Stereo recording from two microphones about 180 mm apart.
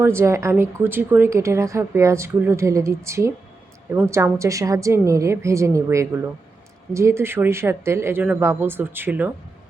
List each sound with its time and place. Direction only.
0.0 s speech: 15° right (ahead or behind)